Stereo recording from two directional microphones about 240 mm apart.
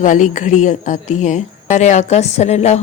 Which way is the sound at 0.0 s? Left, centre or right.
Left.